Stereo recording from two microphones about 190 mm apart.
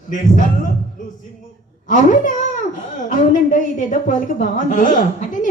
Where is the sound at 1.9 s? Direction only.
45° left (ahead or behind).